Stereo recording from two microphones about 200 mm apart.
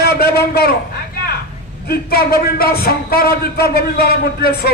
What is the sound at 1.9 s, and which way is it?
A man's voice, 50° left (ahead or behind).